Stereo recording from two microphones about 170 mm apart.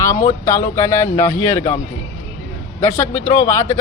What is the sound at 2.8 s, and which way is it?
Speech, 15° left (ahead or behind).